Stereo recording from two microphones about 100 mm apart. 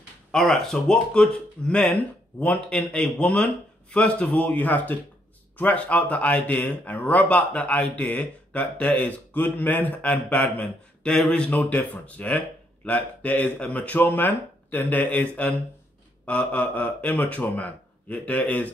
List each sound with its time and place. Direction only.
0.3 s speech: 5° left (ahead or behind)